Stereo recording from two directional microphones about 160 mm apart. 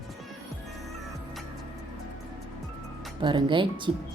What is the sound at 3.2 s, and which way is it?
Speech, 30° right (ahead or behind).